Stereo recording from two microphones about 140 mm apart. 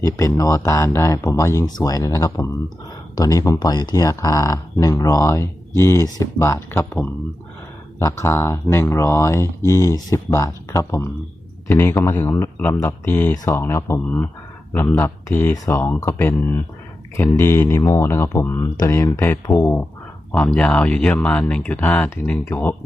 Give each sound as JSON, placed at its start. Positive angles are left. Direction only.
{"t": 0.0, "sound": "speech", "side_deg": 20}
{"t": 20.5, "sound": "speech", "side_deg": 10}